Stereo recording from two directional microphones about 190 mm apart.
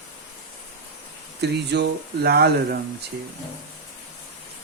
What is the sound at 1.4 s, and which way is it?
Speech, 60° right (ahead or behind).